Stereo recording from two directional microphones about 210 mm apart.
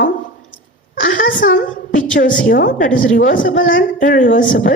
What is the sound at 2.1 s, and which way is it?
Speech, 40° left (ahead or behind).